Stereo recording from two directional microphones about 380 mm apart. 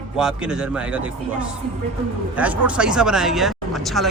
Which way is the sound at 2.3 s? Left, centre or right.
Centre.